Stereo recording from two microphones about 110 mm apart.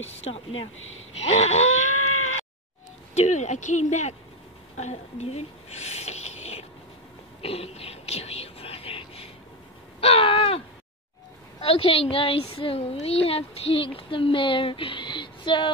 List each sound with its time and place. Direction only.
0.0 s a child's voice: 65° left (ahead or behind)
1.2 s wail: 75° left (ahead or behind)
3.2 s speech: 90° left
7.4 s a sound: 65° left (ahead or behind)
11.6 s a child's voice: 60° left (ahead or behind)